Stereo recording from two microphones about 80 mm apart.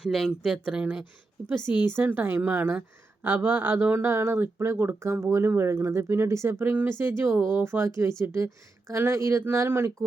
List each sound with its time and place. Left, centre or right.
0.0 s speech: centre
1.7 s speech: right